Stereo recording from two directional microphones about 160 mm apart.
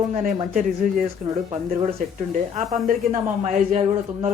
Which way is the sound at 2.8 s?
55° right (ahead or behind).